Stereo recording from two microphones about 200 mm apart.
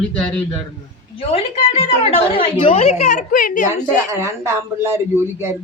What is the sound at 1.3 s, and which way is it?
A woman's voice, 30° left (ahead or behind).